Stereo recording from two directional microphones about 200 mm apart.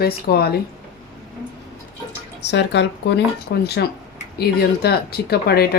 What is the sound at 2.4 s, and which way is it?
Speech, 60° left (ahead or behind).